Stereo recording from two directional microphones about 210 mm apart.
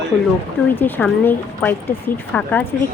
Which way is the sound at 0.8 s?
10° left (ahead or behind).